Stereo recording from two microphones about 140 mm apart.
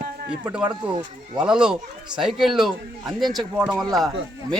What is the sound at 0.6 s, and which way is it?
Speech, 35° right (ahead or behind).